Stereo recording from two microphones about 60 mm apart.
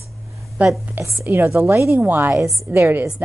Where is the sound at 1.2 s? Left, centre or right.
Right.